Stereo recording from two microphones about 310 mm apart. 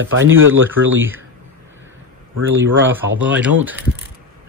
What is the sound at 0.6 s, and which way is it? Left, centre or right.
Speech, centre.